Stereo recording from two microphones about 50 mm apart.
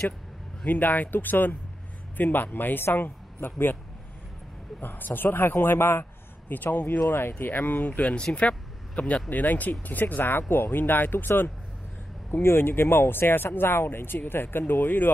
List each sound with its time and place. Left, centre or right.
0.7 s a woman's voice: left
4.7 s speech: left
6.5 s speech: left
7.1 s speech: left